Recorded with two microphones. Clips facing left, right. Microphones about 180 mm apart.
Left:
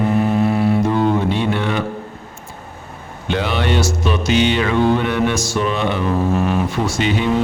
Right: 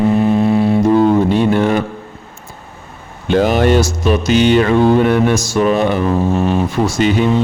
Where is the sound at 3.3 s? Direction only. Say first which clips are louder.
Right 8 dB; 45° right (ahead or behind).